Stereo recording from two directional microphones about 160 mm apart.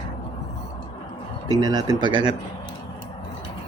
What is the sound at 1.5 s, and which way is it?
Speech, 25° right (ahead or behind).